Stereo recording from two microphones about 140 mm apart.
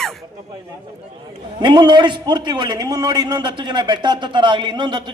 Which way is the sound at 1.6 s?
30° right (ahead or behind).